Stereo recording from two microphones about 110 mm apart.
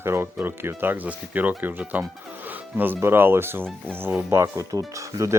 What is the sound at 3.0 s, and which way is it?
Speech, 20° right (ahead or behind).